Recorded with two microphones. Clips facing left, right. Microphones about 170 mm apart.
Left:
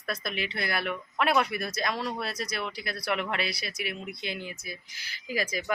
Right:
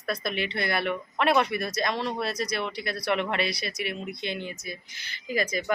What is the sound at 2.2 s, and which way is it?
Speech, 5° left (ahead or behind).